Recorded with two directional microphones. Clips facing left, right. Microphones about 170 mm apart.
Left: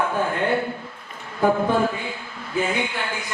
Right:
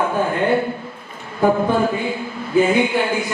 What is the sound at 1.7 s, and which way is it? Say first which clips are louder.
A man's voice: right 4 dB; 10° right (ahead or behind).